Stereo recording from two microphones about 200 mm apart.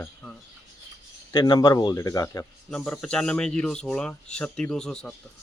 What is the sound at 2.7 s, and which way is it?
Speech, 5° left (ahead or behind).